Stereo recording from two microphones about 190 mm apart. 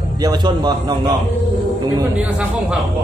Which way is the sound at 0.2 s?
20° right (ahead or behind).